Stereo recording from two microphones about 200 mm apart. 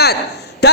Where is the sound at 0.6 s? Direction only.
55° left (ahead or behind).